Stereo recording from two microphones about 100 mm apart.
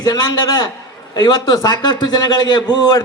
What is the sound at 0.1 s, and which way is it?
A man's voice, 45° left (ahead or behind).